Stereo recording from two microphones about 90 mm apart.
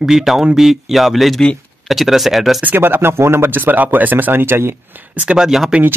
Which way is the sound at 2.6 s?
20° right (ahead or behind).